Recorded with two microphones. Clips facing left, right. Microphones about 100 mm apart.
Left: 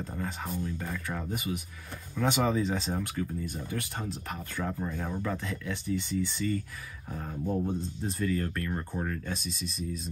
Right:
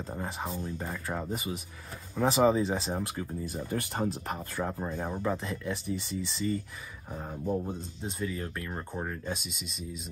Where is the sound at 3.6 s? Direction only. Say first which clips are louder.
Right 4 dB; 35° right (ahead or behind).